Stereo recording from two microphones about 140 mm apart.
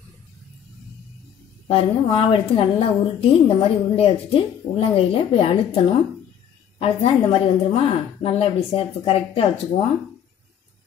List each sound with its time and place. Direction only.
1.7 s a woman's voice: 45° left (ahead or behind)